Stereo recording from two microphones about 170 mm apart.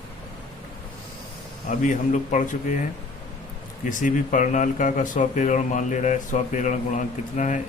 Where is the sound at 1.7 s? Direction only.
45° left (ahead or behind).